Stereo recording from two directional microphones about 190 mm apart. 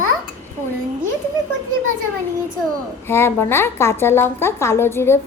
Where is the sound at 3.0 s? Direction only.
10° left (ahead or behind).